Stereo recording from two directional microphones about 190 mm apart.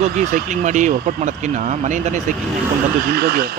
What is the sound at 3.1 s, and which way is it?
Speech, 55° right (ahead or behind).